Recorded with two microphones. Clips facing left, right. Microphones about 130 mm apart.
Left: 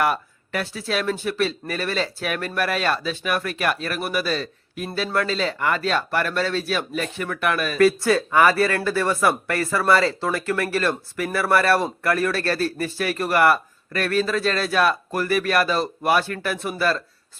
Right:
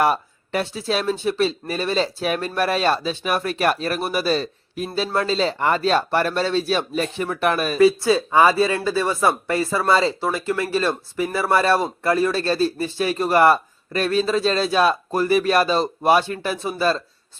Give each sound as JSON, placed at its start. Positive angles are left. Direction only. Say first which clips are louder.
{"t": 0.0, "sound": "speech", "louder": "right 3 dB", "side_deg": -30}
{"t": 7.8, "sound": "speech", "louder": "right 1 dB", "side_deg": -15}